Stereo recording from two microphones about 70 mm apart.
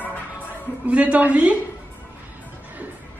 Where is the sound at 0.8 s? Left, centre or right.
Centre.